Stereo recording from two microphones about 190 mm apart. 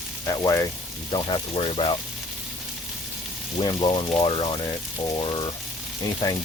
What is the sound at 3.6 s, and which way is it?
Speech, 25° left (ahead or behind).